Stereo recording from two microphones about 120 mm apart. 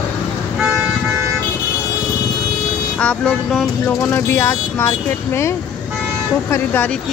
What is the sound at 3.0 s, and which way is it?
Speech, 10° left (ahead or behind).